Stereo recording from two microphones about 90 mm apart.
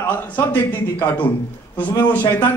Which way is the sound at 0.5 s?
20° left (ahead or behind).